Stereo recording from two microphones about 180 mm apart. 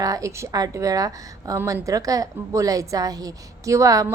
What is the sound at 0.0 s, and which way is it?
Speech, 20° right (ahead or behind).